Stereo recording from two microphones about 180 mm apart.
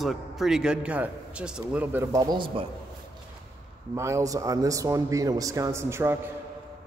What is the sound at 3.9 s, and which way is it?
Speech, 15° right (ahead or behind).